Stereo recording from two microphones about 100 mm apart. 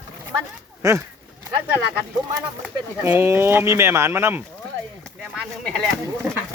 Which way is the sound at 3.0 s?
20° right (ahead or behind).